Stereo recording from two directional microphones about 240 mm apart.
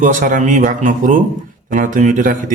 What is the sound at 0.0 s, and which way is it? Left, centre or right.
A man's voice, right.